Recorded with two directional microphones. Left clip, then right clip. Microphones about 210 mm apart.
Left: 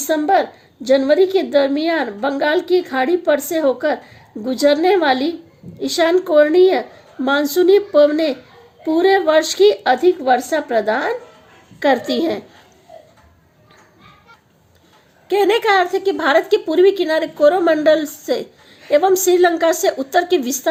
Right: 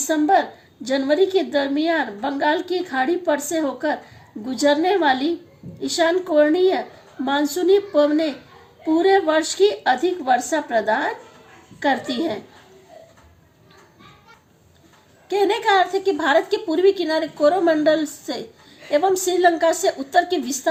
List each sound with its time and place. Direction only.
0.1 s a woman's voice: 45° left (ahead or behind)
15.3 s a woman's voice: 45° left (ahead or behind)